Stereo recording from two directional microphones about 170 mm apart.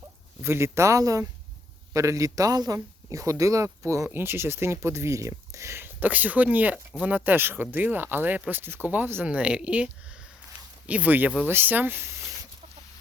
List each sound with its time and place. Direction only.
0.4 s speech: 15° right (ahead or behind)